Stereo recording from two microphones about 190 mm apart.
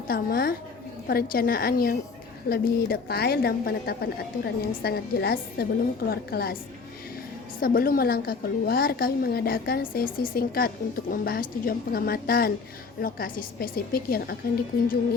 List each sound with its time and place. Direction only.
0.1 s a woman's voice: 50° left (ahead or behind)
7.6 s a woman's voice: 50° left (ahead or behind)